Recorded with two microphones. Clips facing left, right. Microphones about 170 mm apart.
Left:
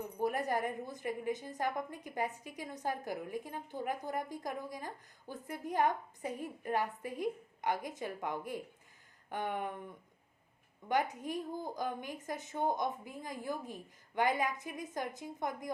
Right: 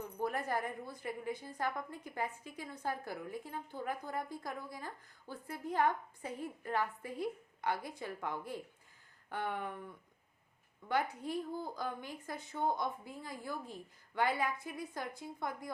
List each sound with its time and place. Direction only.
0.2 s a woman's voice: 15° left (ahead or behind)
10.8 s a woman's voice: 15° left (ahead or behind)